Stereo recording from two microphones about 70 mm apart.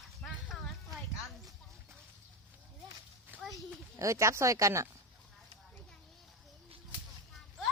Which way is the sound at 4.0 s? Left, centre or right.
Right.